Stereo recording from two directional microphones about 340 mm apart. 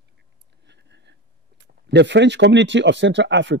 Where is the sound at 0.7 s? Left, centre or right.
Right.